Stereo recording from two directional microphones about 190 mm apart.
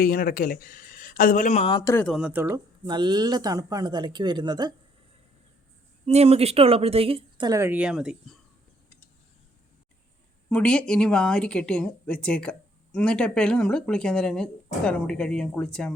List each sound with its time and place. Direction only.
0.0 s speech: 50° left (ahead or behind)
1.7 s a man's voice: 15° left (ahead or behind)
2.0 s speech: 5° right (ahead or behind); by 4.7 s 20° right (ahead or behind)
6.1 s speech: 35° right (ahead or behind); by 8.4 s 5° right (ahead or behind)
10.5 s a woman's voice: 5° left (ahead or behind)